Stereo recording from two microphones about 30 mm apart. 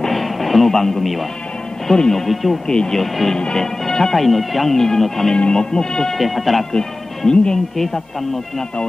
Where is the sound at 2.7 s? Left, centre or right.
Left.